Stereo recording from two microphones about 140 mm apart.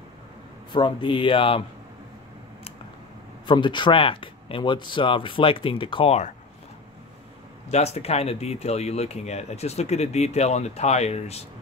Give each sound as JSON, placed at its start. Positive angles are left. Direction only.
{"t": 0.7, "sound": "speech", "side_deg": 35}
{"t": 3.4, "sound": "speech", "side_deg": 35}
{"t": 7.6, "sound": "speech", "side_deg": 50}